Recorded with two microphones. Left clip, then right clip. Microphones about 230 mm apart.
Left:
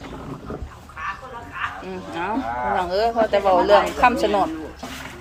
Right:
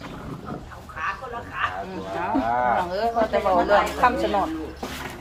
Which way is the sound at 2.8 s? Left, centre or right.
Left.